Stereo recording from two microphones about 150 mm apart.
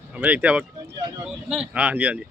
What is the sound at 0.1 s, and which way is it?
Speech, 10° right (ahead or behind).